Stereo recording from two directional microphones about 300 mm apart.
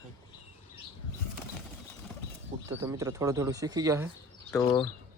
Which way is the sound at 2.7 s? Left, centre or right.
Centre.